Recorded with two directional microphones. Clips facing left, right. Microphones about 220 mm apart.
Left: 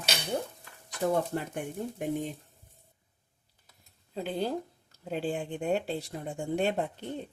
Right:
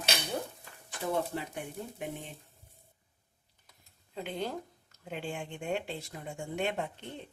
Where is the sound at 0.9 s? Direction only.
50° left (ahead or behind).